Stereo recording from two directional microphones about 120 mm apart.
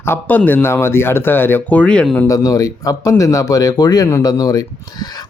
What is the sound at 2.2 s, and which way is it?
Speech, 30° left (ahead or behind).